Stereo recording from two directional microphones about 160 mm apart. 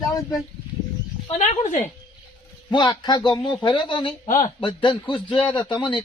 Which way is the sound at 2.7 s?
30° left (ahead or behind).